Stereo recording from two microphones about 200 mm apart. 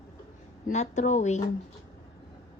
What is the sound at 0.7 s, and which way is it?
Speech, 35° left (ahead or behind).